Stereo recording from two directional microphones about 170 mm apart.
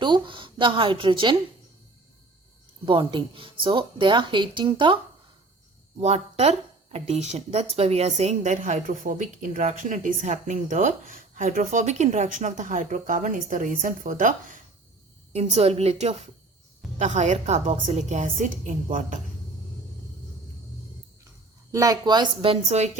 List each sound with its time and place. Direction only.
0.0 s speech: 30° right (ahead or behind)
2.8 s speech: 30° right (ahead or behind)
6.0 s speech: 40° right (ahead or behind)
15.3 s a woman's voice: 40° right (ahead or behind)
21.7 s speech: 20° right (ahead or behind); by 22.9 s 35° right (ahead or behind)